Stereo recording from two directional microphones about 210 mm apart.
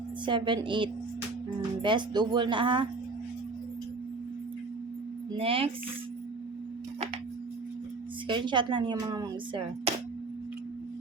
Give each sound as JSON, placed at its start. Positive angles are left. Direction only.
{"t": 0.3, "sound": "speech", "side_deg": -20}
{"t": 5.3, "sound": "speech", "side_deg": -25}
{"t": 8.3, "sound": "speech", "side_deg": -20}